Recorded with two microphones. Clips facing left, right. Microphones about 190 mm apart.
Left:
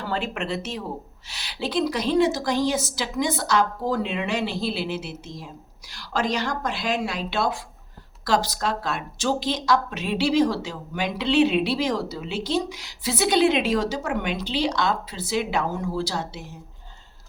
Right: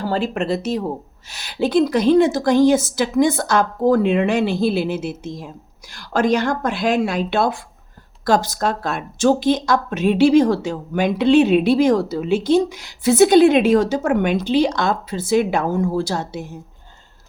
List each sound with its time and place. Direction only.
0.0 s speech: 35° right (ahead or behind)